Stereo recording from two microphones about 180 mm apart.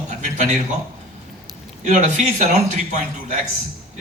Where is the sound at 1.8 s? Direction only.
40° right (ahead or behind).